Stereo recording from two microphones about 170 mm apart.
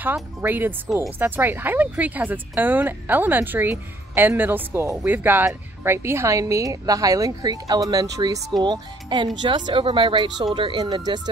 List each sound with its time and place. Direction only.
0.0 s speech: 10° right (ahead or behind)